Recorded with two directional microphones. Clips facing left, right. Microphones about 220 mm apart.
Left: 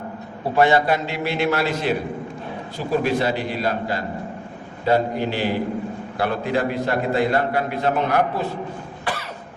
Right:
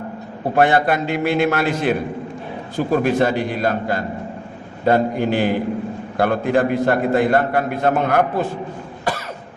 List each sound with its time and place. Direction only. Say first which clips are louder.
0.5 s a man's voice: right 1 dB; 55° right (ahead or behind)